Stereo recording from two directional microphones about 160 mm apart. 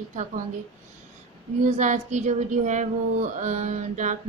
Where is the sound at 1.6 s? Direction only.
50° right (ahead or behind).